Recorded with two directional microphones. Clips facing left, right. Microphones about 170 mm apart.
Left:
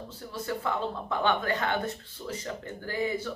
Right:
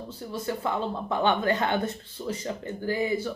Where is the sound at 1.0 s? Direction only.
20° right (ahead or behind).